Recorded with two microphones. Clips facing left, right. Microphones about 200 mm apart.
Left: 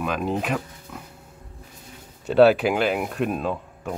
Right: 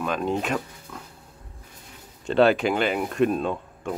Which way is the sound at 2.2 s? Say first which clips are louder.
Left 3 dB; 5° left (ahead or behind).